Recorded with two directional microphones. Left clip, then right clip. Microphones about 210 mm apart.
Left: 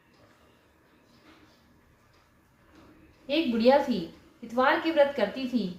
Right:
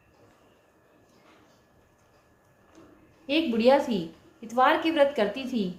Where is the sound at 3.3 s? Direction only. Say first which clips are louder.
Right 1 dB; 40° right (ahead or behind).